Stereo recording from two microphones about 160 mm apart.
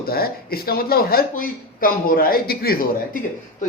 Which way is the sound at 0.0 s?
70° left (ahead or behind).